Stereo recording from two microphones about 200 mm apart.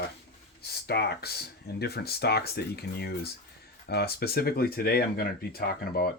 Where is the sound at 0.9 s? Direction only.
55° left (ahead or behind).